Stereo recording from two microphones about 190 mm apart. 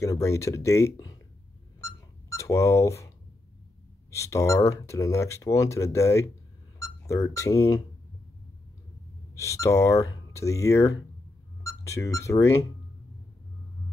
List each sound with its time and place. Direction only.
0.0 s speech: 15° left (ahead or behind)
1.8 s a sound: 15° left (ahead or behind)
4.1 s speech: 15° left (ahead or behind)
9.3 s speech: 15° left (ahead or behind)